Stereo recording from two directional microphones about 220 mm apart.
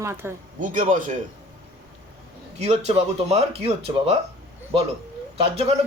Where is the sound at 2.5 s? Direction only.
30° right (ahead or behind).